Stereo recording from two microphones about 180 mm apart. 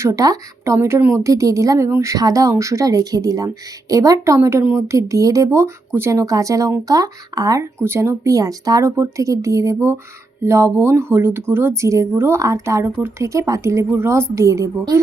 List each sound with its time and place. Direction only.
0.0 s speech: 15° right (ahead or behind)